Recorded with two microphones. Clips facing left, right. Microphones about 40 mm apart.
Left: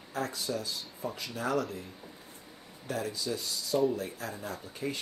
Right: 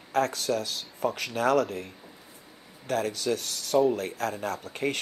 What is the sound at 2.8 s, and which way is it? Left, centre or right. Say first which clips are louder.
Speech: right 7 dB; right.